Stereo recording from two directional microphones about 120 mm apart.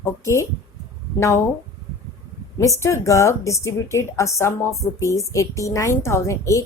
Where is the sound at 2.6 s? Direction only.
25° left (ahead or behind).